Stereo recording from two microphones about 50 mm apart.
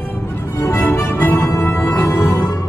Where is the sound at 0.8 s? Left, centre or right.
Left.